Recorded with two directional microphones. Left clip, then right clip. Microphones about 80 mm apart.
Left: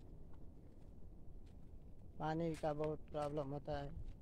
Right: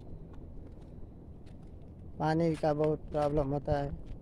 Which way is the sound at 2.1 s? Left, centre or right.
Centre.